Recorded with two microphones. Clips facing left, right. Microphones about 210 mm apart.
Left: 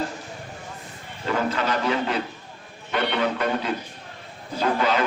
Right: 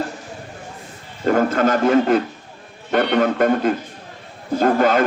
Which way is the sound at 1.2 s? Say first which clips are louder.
Right 8 dB; 50° right (ahead or behind).